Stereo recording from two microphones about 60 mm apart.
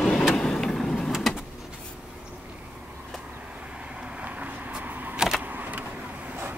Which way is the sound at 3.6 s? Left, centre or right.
Centre.